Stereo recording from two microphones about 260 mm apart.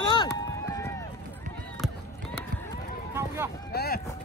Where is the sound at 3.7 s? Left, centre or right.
Left.